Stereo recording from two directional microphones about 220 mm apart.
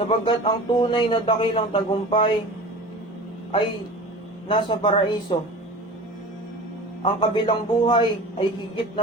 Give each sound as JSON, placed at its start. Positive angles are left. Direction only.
{"t": 0.0, "sound": "a man's voice", "side_deg": 25}
{"t": 4.4, "sound": "a man's voice", "side_deg": 20}
{"t": 7.0, "sound": "a man's voice", "side_deg": 20}